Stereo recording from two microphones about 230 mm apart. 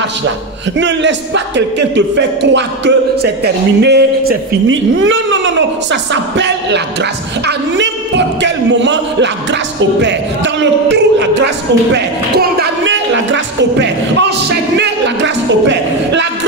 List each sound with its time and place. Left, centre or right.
0.7 s speech: right
6.3 s music: right
7.4 s a woman's voice: right
8.4 s a sound: right
9.8 s speech: right